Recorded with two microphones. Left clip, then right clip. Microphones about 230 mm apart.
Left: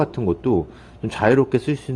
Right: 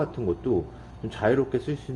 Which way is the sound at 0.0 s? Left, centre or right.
Left.